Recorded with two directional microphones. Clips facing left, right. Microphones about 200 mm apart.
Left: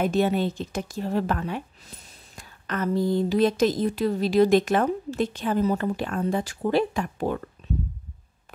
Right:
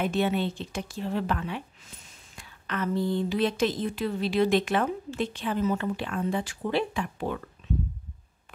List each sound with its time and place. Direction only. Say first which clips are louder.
0.0 s a woman's voice: left 4 dB; 40° left (ahead or behind)